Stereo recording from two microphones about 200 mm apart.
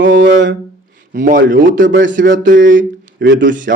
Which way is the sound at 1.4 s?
65° right (ahead or behind).